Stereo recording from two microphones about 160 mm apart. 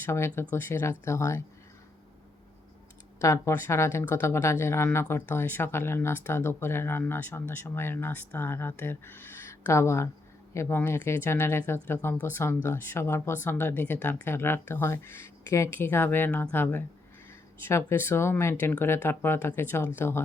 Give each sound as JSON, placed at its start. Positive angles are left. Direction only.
{"t": 0.0, "sound": "speech", "side_deg": 15}
{"t": 3.2, "sound": "speech", "side_deg": 20}